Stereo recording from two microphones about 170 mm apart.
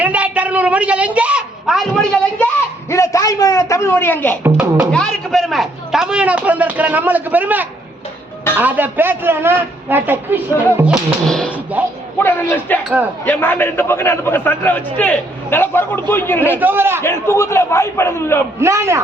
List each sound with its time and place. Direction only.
0.0 s a man's voice: 10° right (ahead or behind)
2.9 s a man's voice: 20° left (ahead or behind)
4.4 s a man's voice: 15° right (ahead or behind)
4.9 s a man's voice: 5° left (ahead or behind)
11.8 s a man's voice: 10° right (ahead or behind)
12.2 s a man's voice: 10° left (ahead or behind)
16.6 s a man's voice: 10° right (ahead or behind)
17.0 s a man's voice: 15° left (ahead or behind)
18.6 s a man's voice: 15° right (ahead or behind)